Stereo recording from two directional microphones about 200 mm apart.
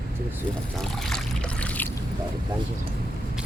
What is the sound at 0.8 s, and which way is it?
Boat, centre (ahead or behind).